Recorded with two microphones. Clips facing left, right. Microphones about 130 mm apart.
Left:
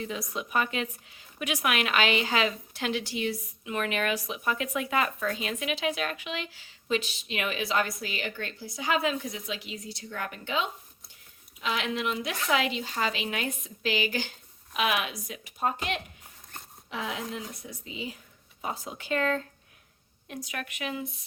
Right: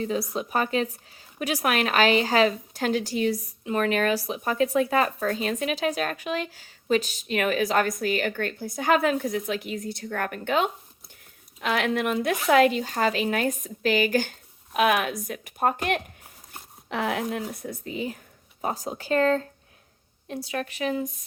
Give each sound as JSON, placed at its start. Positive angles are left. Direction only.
{"t": 0.0, "sound": "a woman's voice", "side_deg": -35}
{"t": 18.6, "sound": "speech", "side_deg": -40}